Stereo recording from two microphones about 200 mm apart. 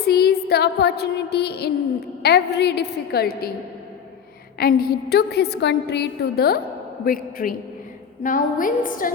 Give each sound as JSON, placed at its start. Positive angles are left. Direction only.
{"t": 0.0, "sound": "music", "side_deg": 55}
{"t": 2.2, "sound": "a woman's voice", "side_deg": 55}
{"t": 4.6, "sound": "a woman's voice", "side_deg": 50}